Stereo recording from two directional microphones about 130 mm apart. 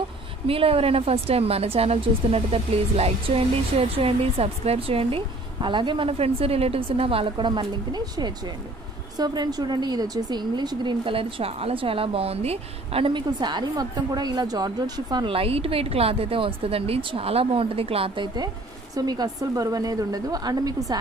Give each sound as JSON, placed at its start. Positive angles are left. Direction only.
{"t": 0.5, "sound": "a woman's voice", "side_deg": -45}
{"t": 15.3, "sound": "a woman's voice", "side_deg": -45}